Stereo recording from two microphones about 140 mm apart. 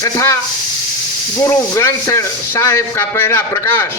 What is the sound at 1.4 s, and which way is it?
Speech, 20° left (ahead or behind).